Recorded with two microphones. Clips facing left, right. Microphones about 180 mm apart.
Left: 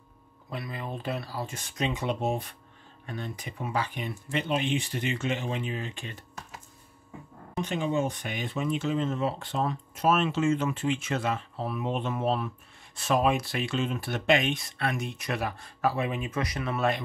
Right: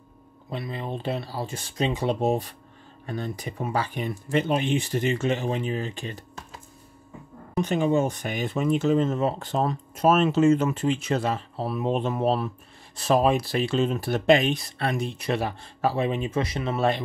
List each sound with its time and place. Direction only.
0.5 s speech: 25° right (ahead or behind)
7.6 s speech: 45° right (ahead or behind); by 17.0 s 30° right (ahead or behind)